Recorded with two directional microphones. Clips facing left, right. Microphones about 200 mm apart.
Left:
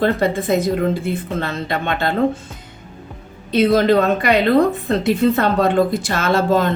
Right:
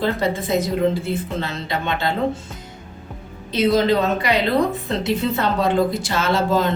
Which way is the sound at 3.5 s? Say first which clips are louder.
Left 3 dB; 55° left (ahead or behind).